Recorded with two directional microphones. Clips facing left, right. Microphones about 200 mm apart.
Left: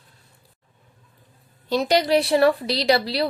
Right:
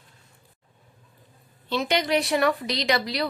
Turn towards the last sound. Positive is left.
turn(degrees=35)  # may be behind; listen again after turning